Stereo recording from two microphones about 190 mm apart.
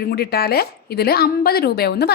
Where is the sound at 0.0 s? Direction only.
55° left (ahead or behind).